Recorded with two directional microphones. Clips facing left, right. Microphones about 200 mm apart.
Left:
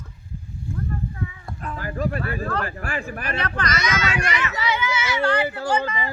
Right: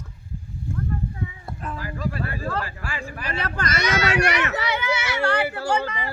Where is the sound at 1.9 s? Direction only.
50° left (ahead or behind).